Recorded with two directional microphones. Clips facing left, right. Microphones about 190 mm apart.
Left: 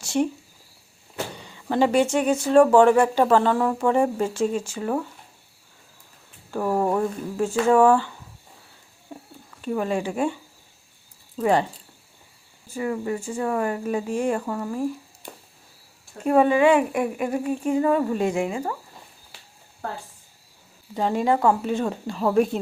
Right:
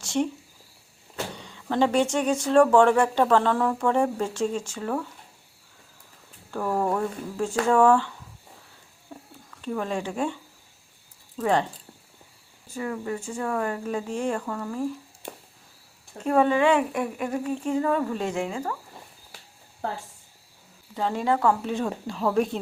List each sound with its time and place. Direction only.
0.0 s a sound: 10° left (ahead or behind)
1.1 s speech: 5° left (ahead or behind)
6.5 s speech: 10° left (ahead or behind)
9.1 s a sound: 15° left (ahead or behind)
9.5 s speech: 10° left (ahead or behind)
11.3 s speech: 10° left (ahead or behind)
12.7 s speech: 10° left (ahead or behind)
15.2 s a sound: 25° right (ahead or behind)
16.1 s speech: 10° left (ahead or behind)
20.9 s speech: 15° left (ahead or behind)
21.6 s speech: 5° left (ahead or behind)